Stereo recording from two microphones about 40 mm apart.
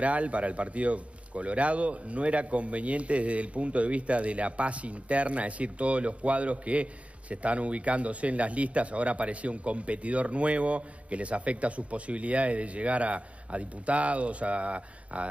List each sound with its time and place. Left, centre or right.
0.0 s a man's voice: right